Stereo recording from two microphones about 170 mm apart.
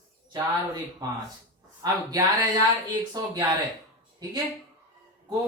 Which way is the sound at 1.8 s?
20° right (ahead or behind).